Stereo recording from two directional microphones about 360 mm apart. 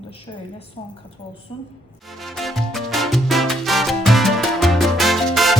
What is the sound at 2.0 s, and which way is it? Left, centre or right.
Salsa music, centre.